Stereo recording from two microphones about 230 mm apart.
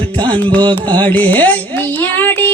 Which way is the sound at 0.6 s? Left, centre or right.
Centre.